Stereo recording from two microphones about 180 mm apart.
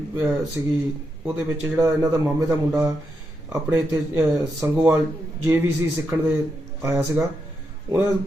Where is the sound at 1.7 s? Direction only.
15° right (ahead or behind).